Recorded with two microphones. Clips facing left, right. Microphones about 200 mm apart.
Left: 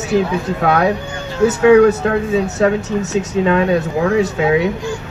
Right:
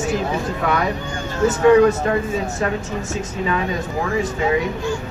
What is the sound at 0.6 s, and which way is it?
Speech, 70° left (ahead or behind).